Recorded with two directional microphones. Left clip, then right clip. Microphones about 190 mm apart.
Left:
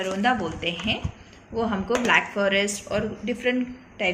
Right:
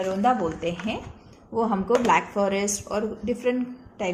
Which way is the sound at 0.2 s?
40° right (ahead or behind).